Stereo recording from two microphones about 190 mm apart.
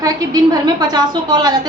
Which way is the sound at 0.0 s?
20° right (ahead or behind).